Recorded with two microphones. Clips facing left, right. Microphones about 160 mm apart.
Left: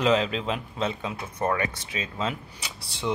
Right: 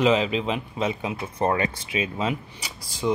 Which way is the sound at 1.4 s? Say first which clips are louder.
Right 3 dB; 25° right (ahead or behind).